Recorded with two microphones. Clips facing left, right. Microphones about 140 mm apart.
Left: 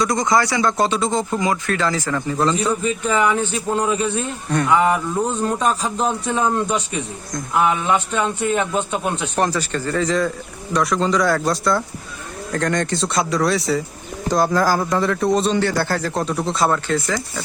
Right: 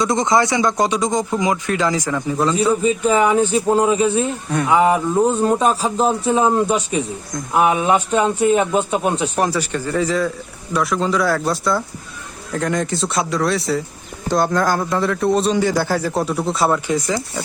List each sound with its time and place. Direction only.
0.0 s speech: 25° right (ahead or behind)
3.2 s a man's voice: 35° right (ahead or behind)
4.2 s speech: 10° right (ahead or behind)
4.8 s a sound: 25° right (ahead or behind)
5.6 s a man's voice: 35° right (ahead or behind)
7.5 s a sound: 20° right (ahead or behind)
8.4 s a man's voice: 10° right (ahead or behind)